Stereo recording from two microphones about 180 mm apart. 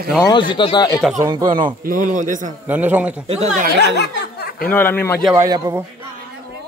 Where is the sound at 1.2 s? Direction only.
20° right (ahead or behind).